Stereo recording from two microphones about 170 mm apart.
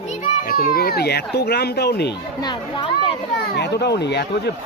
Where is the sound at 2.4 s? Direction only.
25° left (ahead or behind).